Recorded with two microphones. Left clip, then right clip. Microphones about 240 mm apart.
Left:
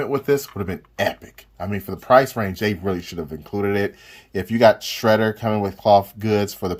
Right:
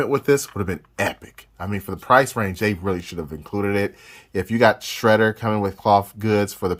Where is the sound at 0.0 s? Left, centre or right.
Right.